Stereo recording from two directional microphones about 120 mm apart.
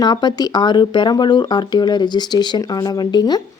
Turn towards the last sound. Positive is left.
turn(degrees=35)  # may be behind; listen again after turning